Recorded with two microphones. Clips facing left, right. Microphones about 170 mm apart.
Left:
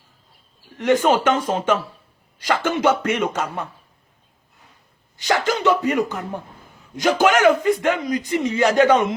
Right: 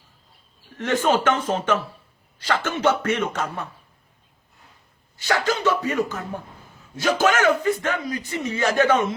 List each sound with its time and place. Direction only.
0.8 s a man's voice: 10° left (ahead or behind)
5.1 s a man's voice: 15° left (ahead or behind)